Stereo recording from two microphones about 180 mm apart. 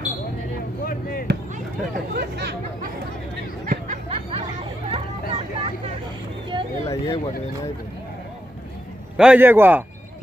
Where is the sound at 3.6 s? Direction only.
45° right (ahead or behind).